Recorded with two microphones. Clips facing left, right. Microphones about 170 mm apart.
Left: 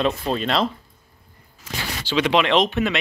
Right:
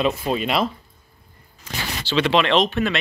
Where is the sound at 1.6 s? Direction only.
10° left (ahead or behind).